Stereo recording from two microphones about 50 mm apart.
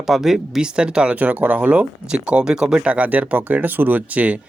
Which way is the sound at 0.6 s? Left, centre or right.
Centre.